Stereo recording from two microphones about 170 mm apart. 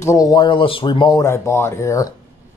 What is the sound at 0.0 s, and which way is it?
Speech, 20° left (ahead or behind).